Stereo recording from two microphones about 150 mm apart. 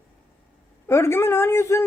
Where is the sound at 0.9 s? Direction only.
15° left (ahead or behind).